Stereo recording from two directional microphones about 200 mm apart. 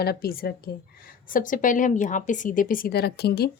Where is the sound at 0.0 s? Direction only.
50° left (ahead or behind).